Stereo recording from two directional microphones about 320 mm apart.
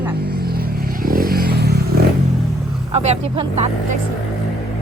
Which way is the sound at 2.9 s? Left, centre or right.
Centre.